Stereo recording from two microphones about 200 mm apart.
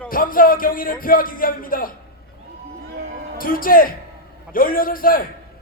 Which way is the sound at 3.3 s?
45° left (ahead or behind).